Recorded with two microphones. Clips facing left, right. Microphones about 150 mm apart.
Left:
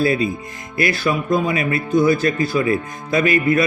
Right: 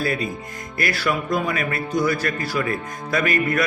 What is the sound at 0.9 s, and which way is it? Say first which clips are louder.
A man's voice: left 3 dB; 20° left (ahead or behind).